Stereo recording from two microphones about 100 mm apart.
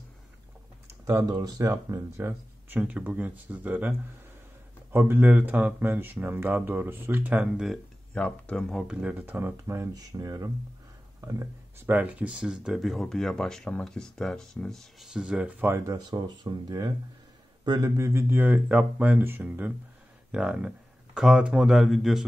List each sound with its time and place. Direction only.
1.2 s speech: 45° right (ahead or behind)
1.6 s speech: 25° right (ahead or behind)
4.9 s speech: 20° right (ahead or behind)
8.1 s speech: 10° left (ahead or behind)
8.8 s speech: 15° right (ahead or behind)
9.9 s speech: 35° right (ahead or behind)
11.9 s speech: 15° right (ahead or behind); by 15.0 s 5° left (ahead or behind)
15.1 s speech: 10° right (ahead or behind)
15.9 s speech: 40° right (ahead or behind); by 22.2 s centre (ahead or behind)